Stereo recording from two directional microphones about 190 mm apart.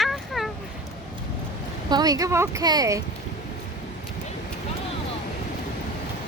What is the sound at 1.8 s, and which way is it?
Speech, 20° right (ahead or behind).